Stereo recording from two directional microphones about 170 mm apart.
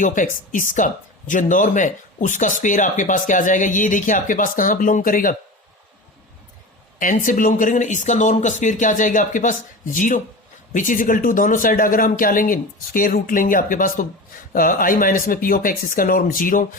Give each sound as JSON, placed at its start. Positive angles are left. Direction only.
{"t": 0.0, "sound": "speech", "side_deg": 50}
{"t": 7.0, "sound": "speech", "side_deg": 50}